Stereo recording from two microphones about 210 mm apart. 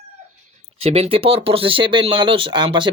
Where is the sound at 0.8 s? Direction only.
30° right (ahead or behind).